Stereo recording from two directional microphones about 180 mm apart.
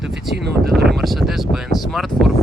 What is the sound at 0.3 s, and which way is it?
Speech, 65° right (ahead or behind).